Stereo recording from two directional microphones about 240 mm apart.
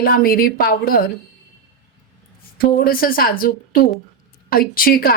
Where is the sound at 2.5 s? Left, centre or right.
Left.